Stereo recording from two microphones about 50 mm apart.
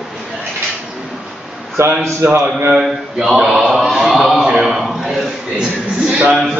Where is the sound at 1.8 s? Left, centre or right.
Right.